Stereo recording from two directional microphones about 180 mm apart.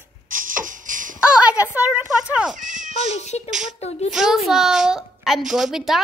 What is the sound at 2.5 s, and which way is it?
Speech, 45° right (ahead or behind).